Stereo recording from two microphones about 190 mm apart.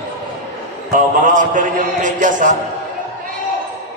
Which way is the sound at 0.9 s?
45° right (ahead or behind).